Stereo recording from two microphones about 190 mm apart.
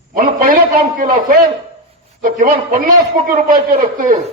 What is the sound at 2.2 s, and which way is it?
A man's voice, 45° right (ahead or behind).